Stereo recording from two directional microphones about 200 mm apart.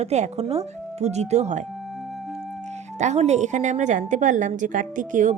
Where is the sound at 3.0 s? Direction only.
35° right (ahead or behind).